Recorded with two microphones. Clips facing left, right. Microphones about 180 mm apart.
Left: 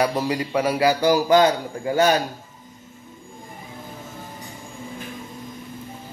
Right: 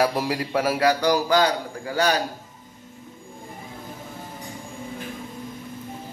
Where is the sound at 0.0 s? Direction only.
5° right (ahead or behind).